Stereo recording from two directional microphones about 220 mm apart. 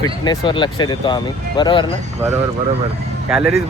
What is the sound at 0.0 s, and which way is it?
Speech, 20° left (ahead or behind).